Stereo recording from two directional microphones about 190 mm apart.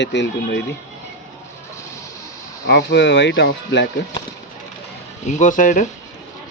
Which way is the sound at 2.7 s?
65° left (ahead or behind).